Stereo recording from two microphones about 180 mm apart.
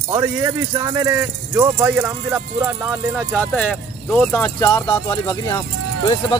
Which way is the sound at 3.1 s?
5° left (ahead or behind).